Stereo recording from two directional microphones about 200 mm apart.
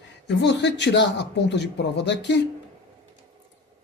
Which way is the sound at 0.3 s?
60° left (ahead or behind).